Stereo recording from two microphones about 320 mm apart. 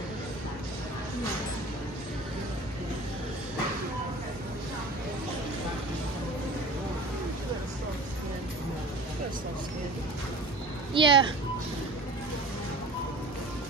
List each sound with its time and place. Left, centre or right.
10.9 s speech: centre